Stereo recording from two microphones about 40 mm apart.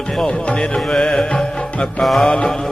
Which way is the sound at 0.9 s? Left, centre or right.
Centre.